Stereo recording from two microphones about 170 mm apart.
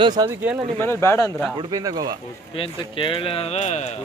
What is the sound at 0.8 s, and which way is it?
Speech, 15° left (ahead or behind).